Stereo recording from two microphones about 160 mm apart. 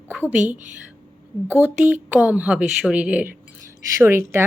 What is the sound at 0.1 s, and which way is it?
A woman's voice, 10° right (ahead or behind).